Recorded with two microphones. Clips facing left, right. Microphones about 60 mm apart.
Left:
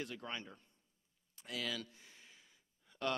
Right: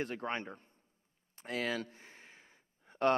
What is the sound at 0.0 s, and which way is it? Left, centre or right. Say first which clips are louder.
A man's voice: right 7 dB; right.